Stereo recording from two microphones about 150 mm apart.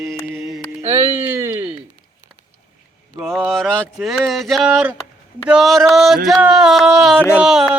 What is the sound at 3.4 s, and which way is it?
Speech, 5° left (ahead or behind).